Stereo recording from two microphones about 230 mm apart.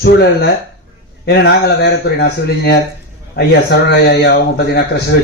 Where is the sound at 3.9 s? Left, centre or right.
Left.